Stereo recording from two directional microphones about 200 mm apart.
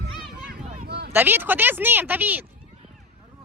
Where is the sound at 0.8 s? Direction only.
55° right (ahead or behind).